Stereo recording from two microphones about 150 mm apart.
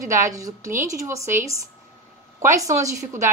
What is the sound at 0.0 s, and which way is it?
A woman's voice, 20° right (ahead or behind).